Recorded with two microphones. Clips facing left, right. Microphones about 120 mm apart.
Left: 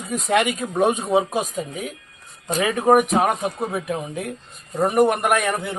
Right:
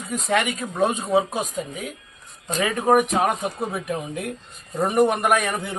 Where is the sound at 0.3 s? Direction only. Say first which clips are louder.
Left 3 dB; 15° left (ahead or behind).